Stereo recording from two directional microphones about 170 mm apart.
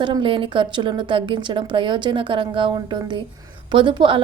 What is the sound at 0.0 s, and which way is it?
A woman's voice, 30° right (ahead or behind).